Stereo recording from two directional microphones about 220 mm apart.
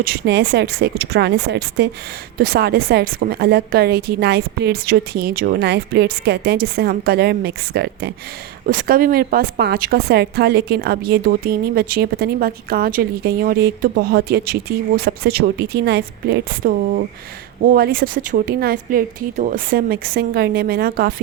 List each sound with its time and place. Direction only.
0.0 s a woman's voice: 45° right (ahead or behind)